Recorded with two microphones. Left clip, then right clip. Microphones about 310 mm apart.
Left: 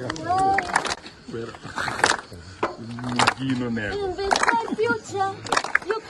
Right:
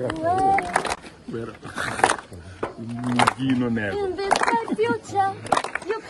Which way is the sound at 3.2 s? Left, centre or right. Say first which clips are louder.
Right 1 dB; right.